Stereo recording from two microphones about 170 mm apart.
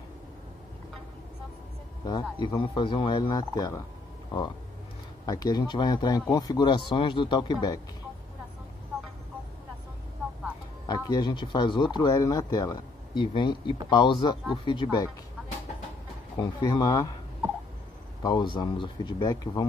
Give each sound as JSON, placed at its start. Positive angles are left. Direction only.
{"t": 2.0, "sound": "speech", "side_deg": 25}
{"t": 5.2, "sound": "speech", "side_deg": 25}
{"t": 10.9, "sound": "speech", "side_deg": 25}
{"t": 16.3, "sound": "speech", "side_deg": 25}
{"t": 18.2, "sound": "speech", "side_deg": 25}